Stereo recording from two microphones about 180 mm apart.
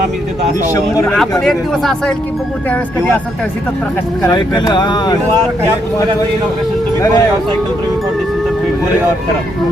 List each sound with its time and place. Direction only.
1.1 s speech: 5° left (ahead or behind)
4.3 s speech: 25° left (ahead or behind)
7.0 s speech: 20° left (ahead or behind)